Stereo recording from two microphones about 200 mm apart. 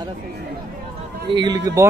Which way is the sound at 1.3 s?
20° right (ahead or behind).